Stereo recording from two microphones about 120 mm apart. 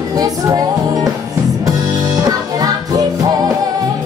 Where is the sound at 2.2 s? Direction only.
30° right (ahead or behind).